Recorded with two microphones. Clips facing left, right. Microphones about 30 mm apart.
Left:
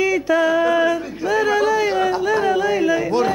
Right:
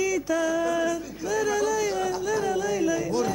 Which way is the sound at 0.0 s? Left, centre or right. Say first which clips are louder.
Left 8 dB; left.